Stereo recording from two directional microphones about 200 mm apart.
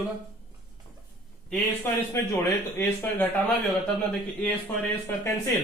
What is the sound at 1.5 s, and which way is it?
A man's voice, 10° left (ahead or behind).